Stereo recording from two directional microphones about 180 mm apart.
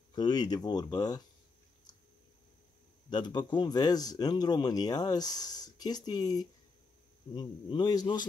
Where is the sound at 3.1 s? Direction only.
25° left (ahead or behind).